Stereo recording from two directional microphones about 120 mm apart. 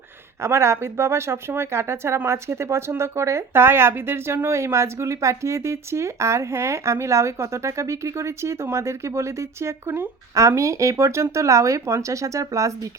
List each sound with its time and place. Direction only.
0.4 s speech: 25° right (ahead or behind)